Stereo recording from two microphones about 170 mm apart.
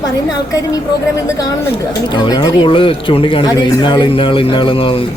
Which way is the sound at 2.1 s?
25° left (ahead or behind).